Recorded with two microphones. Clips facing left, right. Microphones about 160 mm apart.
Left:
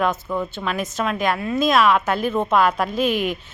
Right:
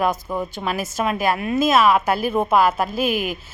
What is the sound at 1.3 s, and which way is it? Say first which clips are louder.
Speech: right 1 dB; 20° right (ahead or behind).